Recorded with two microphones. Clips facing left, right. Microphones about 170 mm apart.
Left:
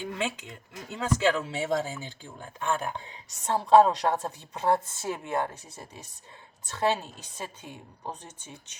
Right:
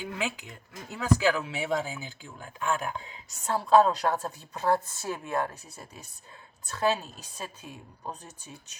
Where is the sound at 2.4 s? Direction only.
35° left (ahead or behind).